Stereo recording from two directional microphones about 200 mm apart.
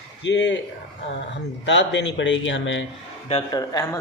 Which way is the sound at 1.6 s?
65° left (ahead or behind).